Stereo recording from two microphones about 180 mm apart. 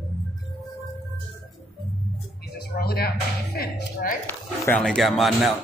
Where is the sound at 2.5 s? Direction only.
60° left (ahead or behind).